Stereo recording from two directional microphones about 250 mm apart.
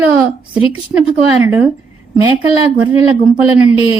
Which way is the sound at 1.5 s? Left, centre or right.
Centre.